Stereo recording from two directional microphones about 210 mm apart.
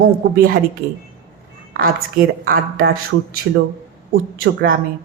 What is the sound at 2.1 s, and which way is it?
Speech, 45° right (ahead or behind).